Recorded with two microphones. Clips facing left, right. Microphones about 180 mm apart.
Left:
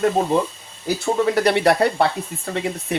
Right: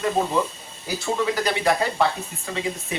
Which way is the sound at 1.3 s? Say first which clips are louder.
Left 7 dB; 65° left (ahead or behind).